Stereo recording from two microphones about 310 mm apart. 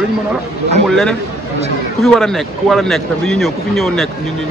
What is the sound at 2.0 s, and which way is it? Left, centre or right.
Speech, centre.